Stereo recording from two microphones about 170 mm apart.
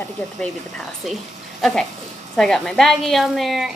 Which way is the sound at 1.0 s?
Centre (ahead or behind).